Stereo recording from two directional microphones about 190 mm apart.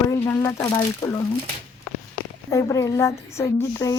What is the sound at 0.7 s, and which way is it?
Speech, 15° left (ahead or behind).